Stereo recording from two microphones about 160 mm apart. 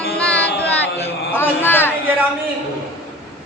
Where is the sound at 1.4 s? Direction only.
15° left (ahead or behind).